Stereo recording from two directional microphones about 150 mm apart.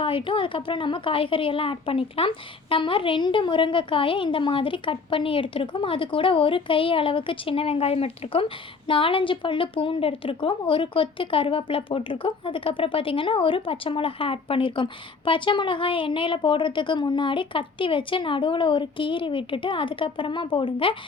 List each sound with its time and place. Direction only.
0.0 s a woman's voice: 35° left (ahead or behind)